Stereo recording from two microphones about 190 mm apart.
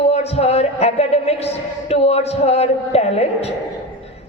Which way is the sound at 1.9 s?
35° left (ahead or behind).